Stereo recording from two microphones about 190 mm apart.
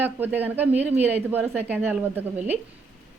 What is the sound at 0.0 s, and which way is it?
Speech, 10° right (ahead or behind).